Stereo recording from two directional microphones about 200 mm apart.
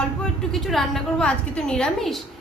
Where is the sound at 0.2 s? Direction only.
Centre (ahead or behind).